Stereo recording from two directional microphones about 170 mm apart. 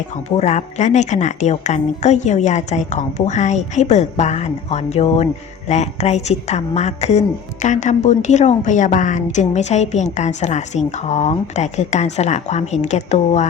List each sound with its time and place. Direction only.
0.3 s a woman's voice: 40° left (ahead or behind)